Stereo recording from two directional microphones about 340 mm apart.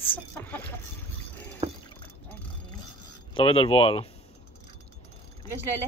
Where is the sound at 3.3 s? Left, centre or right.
Centre.